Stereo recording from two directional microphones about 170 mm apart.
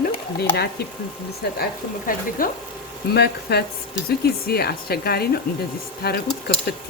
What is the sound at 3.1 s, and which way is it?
Speech, 70° left (ahead or behind).